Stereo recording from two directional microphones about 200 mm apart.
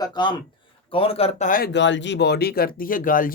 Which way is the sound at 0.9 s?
30° left (ahead or behind).